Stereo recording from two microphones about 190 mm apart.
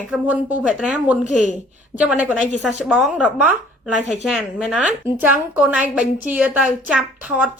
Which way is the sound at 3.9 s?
40° left (ahead or behind).